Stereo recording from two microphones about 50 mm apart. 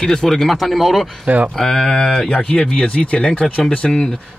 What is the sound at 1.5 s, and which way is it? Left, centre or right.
Speech, centre.